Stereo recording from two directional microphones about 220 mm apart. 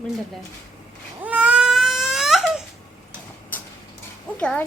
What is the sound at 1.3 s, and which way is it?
Baby cry, 5° right (ahead or behind).